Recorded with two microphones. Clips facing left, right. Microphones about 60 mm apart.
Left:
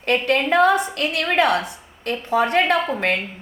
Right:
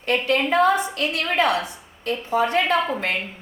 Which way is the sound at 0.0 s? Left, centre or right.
Left.